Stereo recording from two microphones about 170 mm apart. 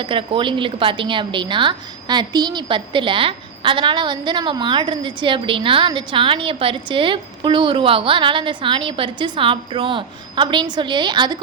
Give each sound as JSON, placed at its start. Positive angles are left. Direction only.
{"t": 0.0, "sound": "speech", "side_deg": -30}